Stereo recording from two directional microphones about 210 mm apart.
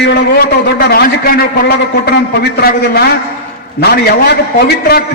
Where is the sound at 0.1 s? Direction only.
50° left (ahead or behind).